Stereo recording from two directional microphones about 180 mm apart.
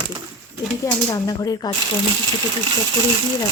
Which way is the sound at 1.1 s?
20° left (ahead or behind).